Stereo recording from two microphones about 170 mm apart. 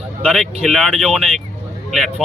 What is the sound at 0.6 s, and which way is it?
Speech, centre (ahead or behind).